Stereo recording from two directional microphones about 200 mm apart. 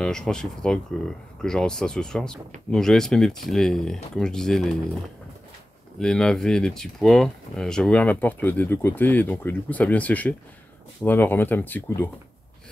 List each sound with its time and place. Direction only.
0.0 s speech: 5° left (ahead or behind)
5.9 s speech: 5° left (ahead or behind)